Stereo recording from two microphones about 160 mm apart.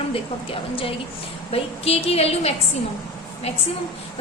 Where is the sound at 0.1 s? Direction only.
35° left (ahead or behind).